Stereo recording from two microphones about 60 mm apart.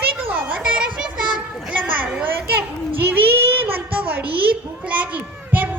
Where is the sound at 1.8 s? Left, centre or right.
Right.